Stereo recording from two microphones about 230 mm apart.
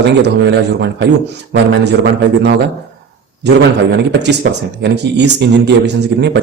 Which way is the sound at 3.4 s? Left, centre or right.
Right.